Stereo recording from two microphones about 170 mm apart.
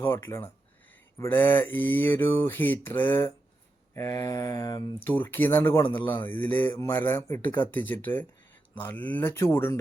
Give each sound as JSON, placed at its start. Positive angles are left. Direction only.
{"t": 0.0, "sound": "speech", "side_deg": 15}
{"t": 5.1, "sound": "speech", "side_deg": 10}